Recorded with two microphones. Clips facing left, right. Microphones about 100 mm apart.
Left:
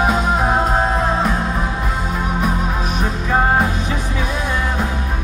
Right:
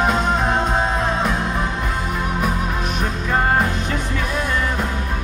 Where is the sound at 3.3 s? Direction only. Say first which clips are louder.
Left 2 dB; 10° left (ahead or behind).